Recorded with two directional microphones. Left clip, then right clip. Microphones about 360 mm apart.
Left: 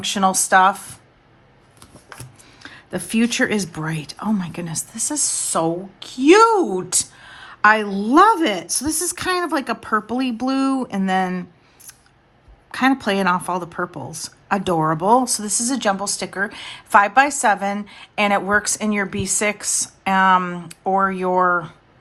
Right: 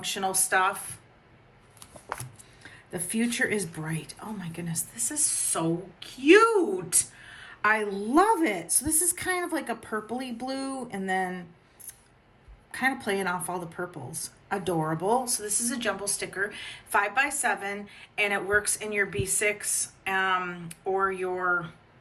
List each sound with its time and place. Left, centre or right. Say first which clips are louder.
0.1 s speech: left 11 dB; centre
2.6 s speech: left 9 dB; centre
7.9 s a woman's voice: left 6 dB; left
8.1 s speech: left 9 dB; centre
12.7 s speech: left 9 dB; centre